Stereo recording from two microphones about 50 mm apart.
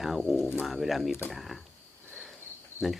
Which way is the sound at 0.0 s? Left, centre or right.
Centre.